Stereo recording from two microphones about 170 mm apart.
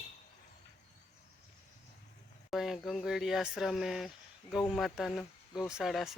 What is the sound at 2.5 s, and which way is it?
Speech, centre (ahead or behind).